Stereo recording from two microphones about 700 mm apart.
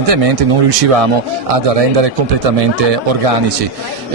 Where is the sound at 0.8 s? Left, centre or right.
Right.